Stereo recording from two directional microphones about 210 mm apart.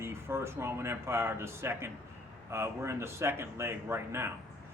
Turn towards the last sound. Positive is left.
turn(degrees=-10)  # may be behind; listen again after turning